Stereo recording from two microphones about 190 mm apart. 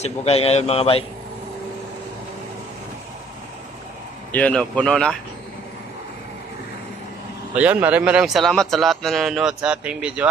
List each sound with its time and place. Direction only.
0.0 s a man's voice: 30° left (ahead or behind)
4.3 s a man's voice: 5° left (ahead or behind)
7.5 s a man's voice: 10° right (ahead or behind)